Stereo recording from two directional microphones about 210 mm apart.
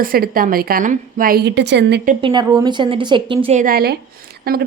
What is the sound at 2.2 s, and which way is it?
A woman's voice, 20° right (ahead or behind).